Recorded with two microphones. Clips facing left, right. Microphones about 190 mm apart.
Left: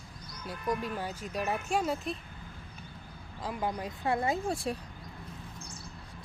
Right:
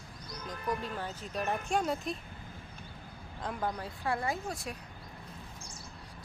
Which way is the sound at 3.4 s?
5° left (ahead or behind).